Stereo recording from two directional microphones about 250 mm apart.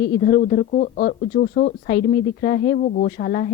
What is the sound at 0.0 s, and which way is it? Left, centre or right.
A woman's voice, left.